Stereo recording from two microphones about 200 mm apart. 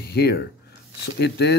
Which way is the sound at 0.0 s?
50° left (ahead or behind).